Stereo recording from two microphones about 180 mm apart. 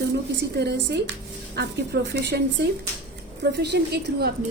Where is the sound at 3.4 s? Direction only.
70° right (ahead or behind).